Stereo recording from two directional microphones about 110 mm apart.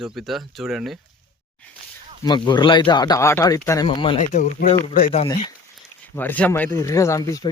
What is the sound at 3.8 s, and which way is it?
Speech, 50° left (ahead or behind).